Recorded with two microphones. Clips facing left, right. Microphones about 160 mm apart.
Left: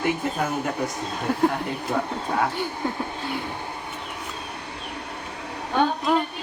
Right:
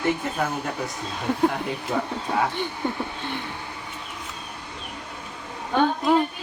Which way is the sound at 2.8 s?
Centre (ahead or behind).